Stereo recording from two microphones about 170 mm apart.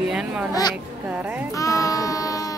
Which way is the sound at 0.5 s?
20° left (ahead or behind).